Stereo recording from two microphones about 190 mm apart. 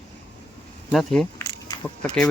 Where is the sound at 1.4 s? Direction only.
20° left (ahead or behind).